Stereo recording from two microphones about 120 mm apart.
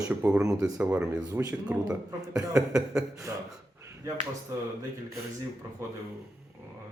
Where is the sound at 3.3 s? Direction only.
25° right (ahead or behind).